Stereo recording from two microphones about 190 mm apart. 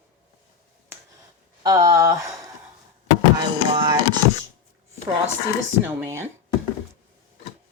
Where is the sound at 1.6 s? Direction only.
20° right (ahead or behind).